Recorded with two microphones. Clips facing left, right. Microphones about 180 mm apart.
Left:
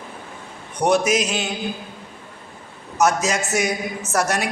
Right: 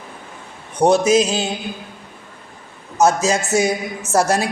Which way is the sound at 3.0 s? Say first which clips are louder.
Right 3 dB; 30° right (ahead or behind).